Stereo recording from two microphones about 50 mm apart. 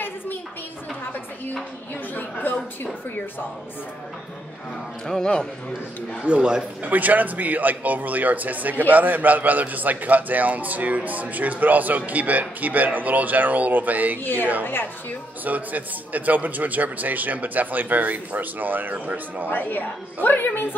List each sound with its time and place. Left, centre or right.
2.4 s a sound: left
5.0 s speech: centre
6.2 s speech: right
6.8 s speech: right
14.2 s a woman's voice: left
15.4 s speech: right
19.5 s a woman's voice: left